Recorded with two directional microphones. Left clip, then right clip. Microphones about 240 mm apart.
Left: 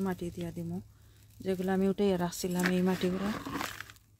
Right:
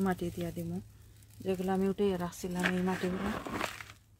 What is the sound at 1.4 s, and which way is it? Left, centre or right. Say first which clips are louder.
Speech: left 1 dB; left.